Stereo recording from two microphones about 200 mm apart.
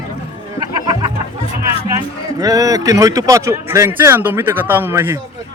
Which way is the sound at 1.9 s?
15° right (ahead or behind).